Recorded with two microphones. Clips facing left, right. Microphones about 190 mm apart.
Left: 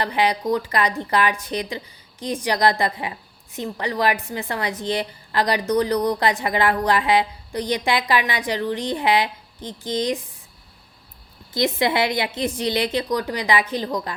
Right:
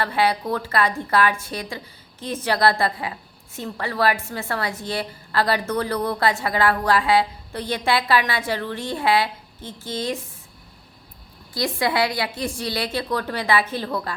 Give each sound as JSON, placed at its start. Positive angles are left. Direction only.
{"t": 0.0, "sound": "a woman's voice", "side_deg": 15}
{"t": 11.5, "sound": "a woman's voice", "side_deg": 20}